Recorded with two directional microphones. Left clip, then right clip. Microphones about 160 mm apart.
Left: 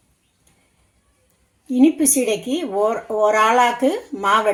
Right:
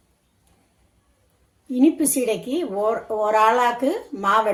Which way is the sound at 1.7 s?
45° left (ahead or behind).